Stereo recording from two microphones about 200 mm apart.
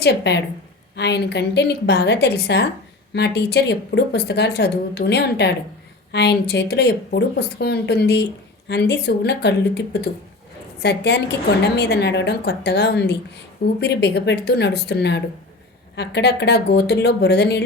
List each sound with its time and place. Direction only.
0.0 s speech: 55° left (ahead or behind)